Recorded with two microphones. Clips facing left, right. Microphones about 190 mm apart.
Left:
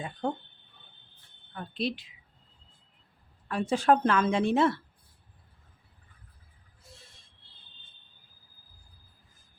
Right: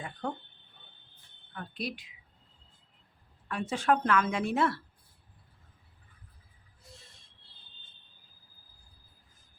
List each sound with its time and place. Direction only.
0.0 s a sound: 25° left (ahead or behind)
1.5 s speech: 25° left (ahead or behind)
3.5 s speech: 35° left (ahead or behind)